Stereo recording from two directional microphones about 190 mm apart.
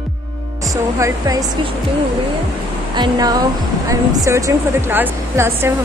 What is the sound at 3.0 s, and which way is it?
Speech, 20° right (ahead or behind).